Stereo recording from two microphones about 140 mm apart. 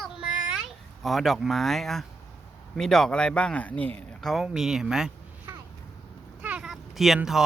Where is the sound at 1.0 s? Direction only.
Centre (ahead or behind).